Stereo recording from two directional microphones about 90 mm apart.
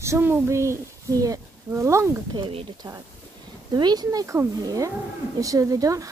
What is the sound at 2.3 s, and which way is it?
Speech, 75° right (ahead or behind).